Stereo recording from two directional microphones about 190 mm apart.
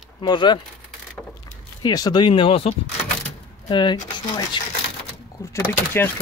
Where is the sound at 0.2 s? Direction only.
25° left (ahead or behind).